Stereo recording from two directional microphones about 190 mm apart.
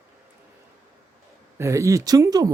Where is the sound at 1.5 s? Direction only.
15° right (ahead or behind).